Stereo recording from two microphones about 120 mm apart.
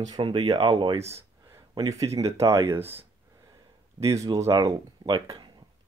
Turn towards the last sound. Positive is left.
turn(degrees=-35)  # may be behind; listen again after turning